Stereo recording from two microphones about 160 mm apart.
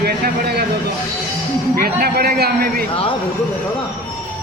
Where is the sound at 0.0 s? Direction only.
80° right.